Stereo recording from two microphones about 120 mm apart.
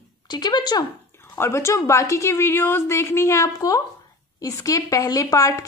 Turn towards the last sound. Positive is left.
turn(degrees=30)  # may be behind; listen again after turning